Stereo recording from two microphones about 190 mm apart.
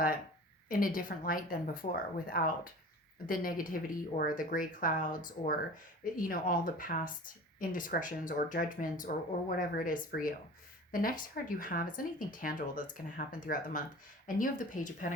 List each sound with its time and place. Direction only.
0.7 s speech: 45° left (ahead or behind)